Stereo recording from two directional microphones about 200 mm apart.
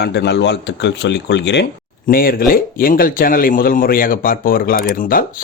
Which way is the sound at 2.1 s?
45° left (ahead or behind).